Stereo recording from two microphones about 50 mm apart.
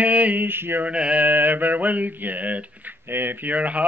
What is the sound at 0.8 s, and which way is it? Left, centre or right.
Speech, right.